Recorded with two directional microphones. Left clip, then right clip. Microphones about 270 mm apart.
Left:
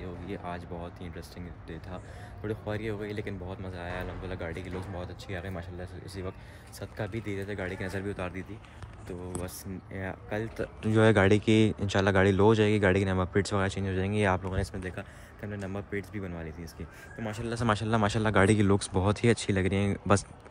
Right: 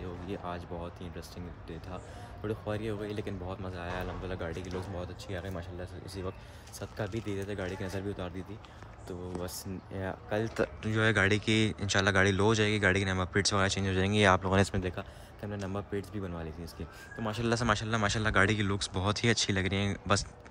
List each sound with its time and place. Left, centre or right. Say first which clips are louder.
0.3 s speech: left 1 dB; centre
2.4 s speech: left 1 dB; centre
9.9 s speech: right 1 dB; centre
10.4 s speech: right 4 dB; right
10.8 s speech: left 6 dB; centre
14.5 s speech: right 7 dB; right
14.8 s speech: right 2 dB; centre
17.6 s speech: left 6 dB; centre